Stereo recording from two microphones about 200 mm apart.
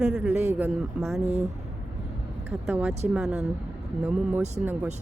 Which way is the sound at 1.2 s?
35° right (ahead or behind).